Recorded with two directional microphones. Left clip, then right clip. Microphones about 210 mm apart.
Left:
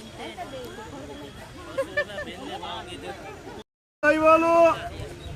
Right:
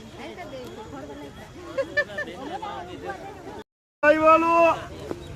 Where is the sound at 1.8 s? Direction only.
30° right (ahead or behind).